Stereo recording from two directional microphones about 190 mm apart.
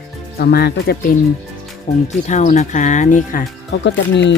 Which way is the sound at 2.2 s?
40° left (ahead or behind).